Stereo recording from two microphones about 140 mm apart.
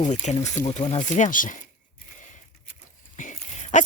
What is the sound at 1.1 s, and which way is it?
Speech, 65° left (ahead or behind).